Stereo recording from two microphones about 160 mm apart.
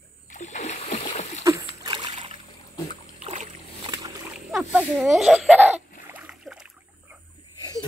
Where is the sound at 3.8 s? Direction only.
25° right (ahead or behind).